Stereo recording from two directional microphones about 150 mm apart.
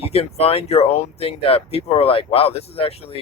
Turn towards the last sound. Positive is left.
turn(degrees=40)  # may be behind; listen again after turning